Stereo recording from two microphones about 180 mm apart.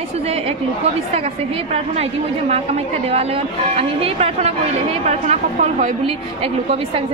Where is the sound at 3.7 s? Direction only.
35° right (ahead or behind).